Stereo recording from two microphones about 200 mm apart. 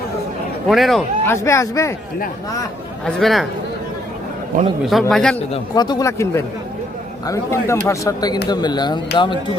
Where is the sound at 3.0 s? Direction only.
Centre (ahead or behind).